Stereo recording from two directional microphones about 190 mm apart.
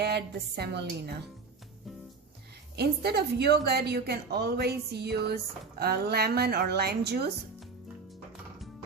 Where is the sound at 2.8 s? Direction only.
60° right (ahead or behind).